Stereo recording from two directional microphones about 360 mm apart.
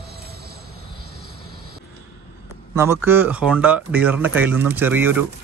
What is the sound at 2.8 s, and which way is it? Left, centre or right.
Speech, centre.